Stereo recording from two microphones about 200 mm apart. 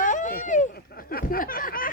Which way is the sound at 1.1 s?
45° left (ahead or behind).